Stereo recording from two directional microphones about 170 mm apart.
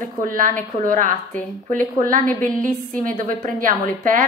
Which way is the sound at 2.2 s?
5° left (ahead or behind).